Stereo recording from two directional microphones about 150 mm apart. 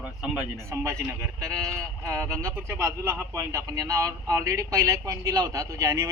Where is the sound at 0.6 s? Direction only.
20° right (ahead or behind).